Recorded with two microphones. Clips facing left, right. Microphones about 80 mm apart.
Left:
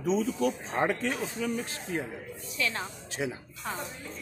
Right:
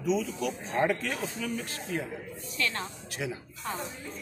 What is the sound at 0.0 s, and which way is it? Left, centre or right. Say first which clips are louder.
Speech: left 2 dB; left.